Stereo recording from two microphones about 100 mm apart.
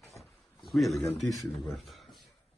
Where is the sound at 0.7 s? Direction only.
Centre (ahead or behind).